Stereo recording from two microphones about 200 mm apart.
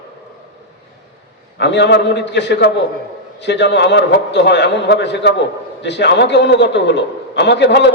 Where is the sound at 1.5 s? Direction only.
60° left (ahead or behind).